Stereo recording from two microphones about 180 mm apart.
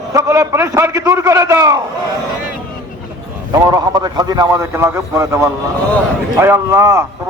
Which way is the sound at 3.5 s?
25° right (ahead or behind).